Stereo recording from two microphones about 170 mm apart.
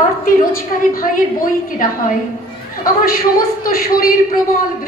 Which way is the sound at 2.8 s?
55° left (ahead or behind).